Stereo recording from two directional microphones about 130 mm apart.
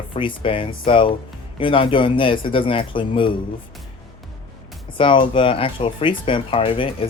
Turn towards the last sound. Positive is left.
turn(degrees=45)  # may be behind; listen again after turning